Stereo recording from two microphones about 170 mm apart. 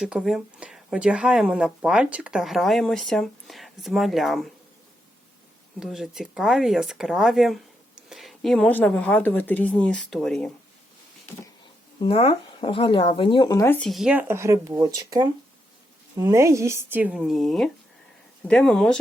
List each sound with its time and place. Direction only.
0.0 s speech: 5° right (ahead or behind)
5.8 s speech: centre (ahead or behind)
11.9 s speech: 35° left (ahead or behind)
13.7 s speech: centre (ahead or behind)